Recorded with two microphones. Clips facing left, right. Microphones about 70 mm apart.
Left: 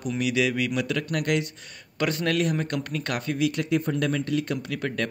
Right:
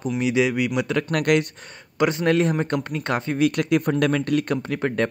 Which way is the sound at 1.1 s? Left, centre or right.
Right.